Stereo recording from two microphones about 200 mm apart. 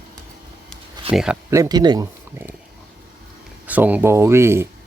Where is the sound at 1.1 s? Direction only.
5° right (ahead or behind).